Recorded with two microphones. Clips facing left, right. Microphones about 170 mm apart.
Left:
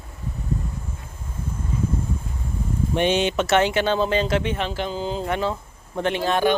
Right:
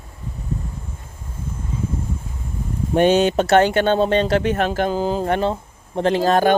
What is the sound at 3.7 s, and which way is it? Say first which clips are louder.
Speech: right 4 dB; 50° right (ahead or behind).